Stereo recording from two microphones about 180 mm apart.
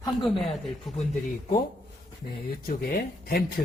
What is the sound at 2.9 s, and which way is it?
Speech, 55° left (ahead or behind).